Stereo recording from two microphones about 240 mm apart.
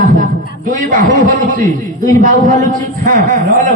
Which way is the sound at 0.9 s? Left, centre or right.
Right.